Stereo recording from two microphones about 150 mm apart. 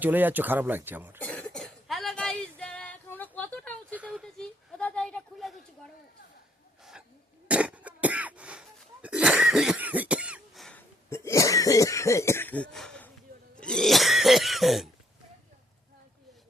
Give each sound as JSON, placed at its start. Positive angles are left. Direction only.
{"t": 0.0, "sound": "speech", "side_deg": -10}
{"t": 1.2, "sound": "cough", "side_deg": 10}
{"t": 3.9, "sound": "a sound", "side_deg": -10}
{"t": 4.8, "sound": "a sound", "side_deg": 10}
{"t": 7.4, "sound": "cough", "side_deg": -10}
{"t": 10.8, "sound": "cough", "side_deg": 20}